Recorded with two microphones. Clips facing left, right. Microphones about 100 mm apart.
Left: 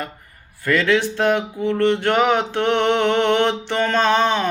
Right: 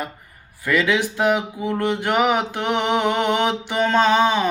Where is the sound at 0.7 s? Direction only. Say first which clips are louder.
Left 2 dB; 10° right (ahead or behind).